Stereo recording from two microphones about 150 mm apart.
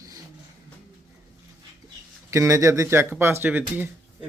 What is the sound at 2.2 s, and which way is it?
Speech, 20° right (ahead or behind).